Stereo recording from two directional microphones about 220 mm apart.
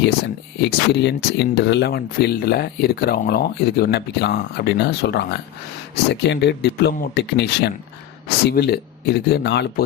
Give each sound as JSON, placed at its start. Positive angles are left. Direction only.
{"t": 0.6, "sound": "speech", "side_deg": 50}